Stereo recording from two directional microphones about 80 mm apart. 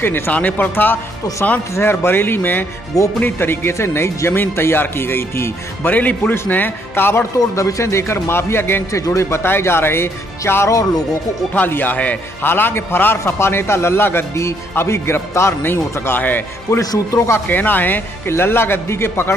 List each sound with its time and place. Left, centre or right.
0.0 s a man's voice: left
7.3 s speech: left
11.5 s a man's voice: left